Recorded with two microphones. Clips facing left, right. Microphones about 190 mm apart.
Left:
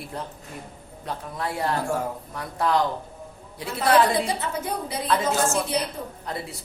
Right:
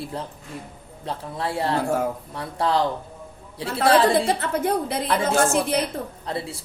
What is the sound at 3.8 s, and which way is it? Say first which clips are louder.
Music: right 2 dB; 30° right (ahead or behind).